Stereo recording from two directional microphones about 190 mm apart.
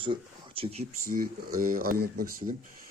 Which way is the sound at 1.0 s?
50° right (ahead or behind).